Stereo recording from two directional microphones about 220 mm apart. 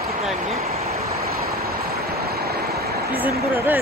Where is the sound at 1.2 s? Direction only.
45° right (ahead or behind).